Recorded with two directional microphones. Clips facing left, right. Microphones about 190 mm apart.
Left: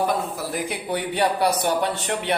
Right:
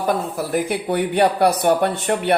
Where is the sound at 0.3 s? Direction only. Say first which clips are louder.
Right 6 dB; 55° right (ahead or behind).